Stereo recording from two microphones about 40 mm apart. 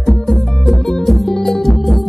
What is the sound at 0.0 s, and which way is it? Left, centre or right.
Music, centre.